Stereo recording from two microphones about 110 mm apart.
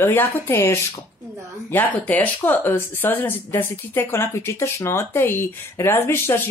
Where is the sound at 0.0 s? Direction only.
20° left (ahead or behind).